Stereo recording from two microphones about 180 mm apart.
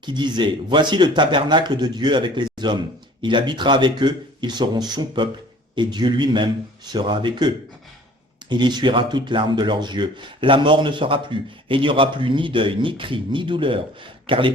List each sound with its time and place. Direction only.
0.0 s speech: 25° right (ahead or behind)